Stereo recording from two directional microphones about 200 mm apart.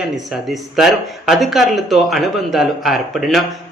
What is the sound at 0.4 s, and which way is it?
Speech, centre (ahead or behind).